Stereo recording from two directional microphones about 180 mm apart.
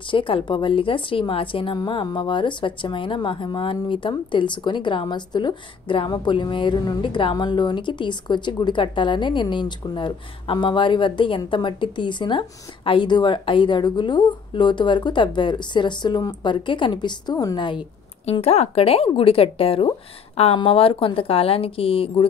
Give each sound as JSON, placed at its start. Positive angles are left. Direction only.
{"t": 0.0, "sound": "a woman's voice", "side_deg": 30}